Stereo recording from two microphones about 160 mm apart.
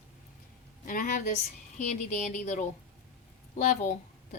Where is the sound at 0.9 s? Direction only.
55° left (ahead or behind).